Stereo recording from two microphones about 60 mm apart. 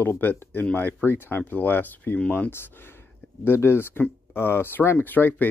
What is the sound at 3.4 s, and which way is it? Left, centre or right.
Speech, left.